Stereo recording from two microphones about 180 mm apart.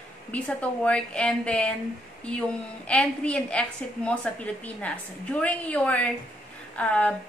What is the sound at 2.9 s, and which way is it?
A woman's voice, 5° left (ahead or behind).